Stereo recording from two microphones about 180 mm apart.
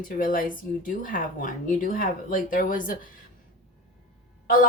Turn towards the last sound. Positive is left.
turn(degrees=50)  # may be behind; listen again after turning